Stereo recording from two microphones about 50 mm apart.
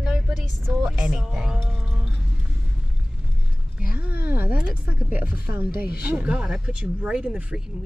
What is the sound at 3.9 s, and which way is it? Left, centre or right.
Speech, right.